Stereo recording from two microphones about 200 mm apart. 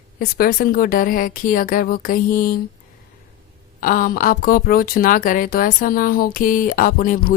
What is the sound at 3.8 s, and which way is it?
Speech, 45° left (ahead or behind).